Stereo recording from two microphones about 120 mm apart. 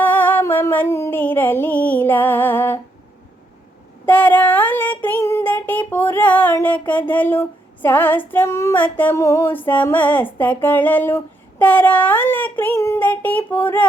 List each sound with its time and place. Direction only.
0.0 s music: 15° left (ahead or behind)
4.0 s child singing: 15° left (ahead or behind)
5.9 s music: 15° left (ahead or behind)
7.1 s a sound: 15° left (ahead or behind)
8.3 s female singing: 20° left (ahead or behind)